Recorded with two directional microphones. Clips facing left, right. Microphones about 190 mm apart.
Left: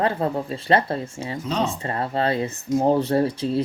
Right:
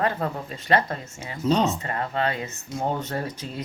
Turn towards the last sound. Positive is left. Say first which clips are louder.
# left 10 dB
turn(degrees=30)  # may be behind; listen again after turning